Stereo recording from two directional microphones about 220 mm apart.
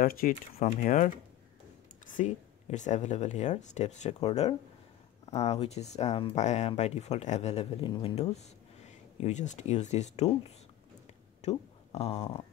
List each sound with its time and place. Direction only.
0.0 s speech: 40° left (ahead or behind)
2.1 s speech: 35° left (ahead or behind)
11.4 s speech: 30° left (ahead or behind)